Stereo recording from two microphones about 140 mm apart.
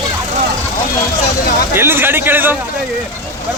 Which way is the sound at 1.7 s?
15° right (ahead or behind).